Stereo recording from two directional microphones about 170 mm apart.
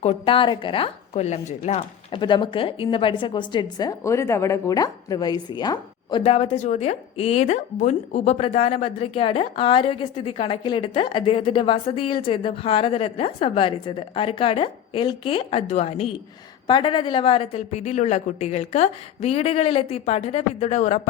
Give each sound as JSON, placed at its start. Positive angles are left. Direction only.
{"t": 0.0, "sound": "a woman's voice", "side_deg": 35}
{"t": 2.1, "sound": "a woman's voice", "side_deg": 30}
{"t": 16.6, "sound": "a woman's voice", "side_deg": 30}